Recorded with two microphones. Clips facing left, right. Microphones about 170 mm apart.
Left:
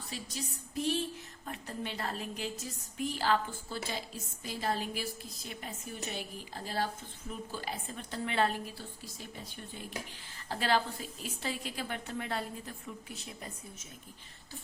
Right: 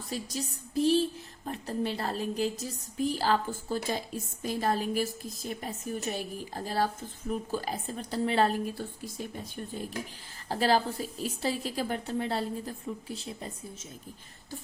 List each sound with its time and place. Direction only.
0.1 s a woman's voice: 35° right (ahead or behind)
8.8 s speech: 55° right (ahead or behind)
10.5 s a woman's voice: 35° right (ahead or behind)